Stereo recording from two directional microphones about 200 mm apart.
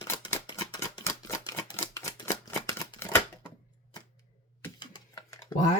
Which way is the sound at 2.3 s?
15° left (ahead or behind).